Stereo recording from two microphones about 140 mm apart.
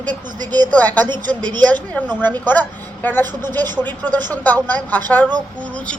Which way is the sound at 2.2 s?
15° left (ahead or behind).